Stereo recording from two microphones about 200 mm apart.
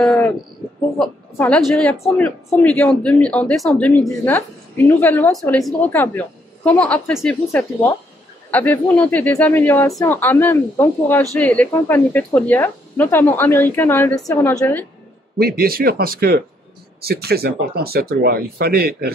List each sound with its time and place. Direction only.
0.0 s cricket: 5° left (ahead or behind)
0.9 s speech: 5° left (ahead or behind)
5.3 s a woman's voice: centre (ahead or behind)
15.3 s speech: 50° right (ahead or behind)